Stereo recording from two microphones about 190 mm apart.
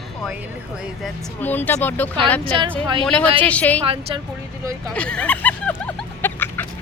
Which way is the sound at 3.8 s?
30° right (ahead or behind).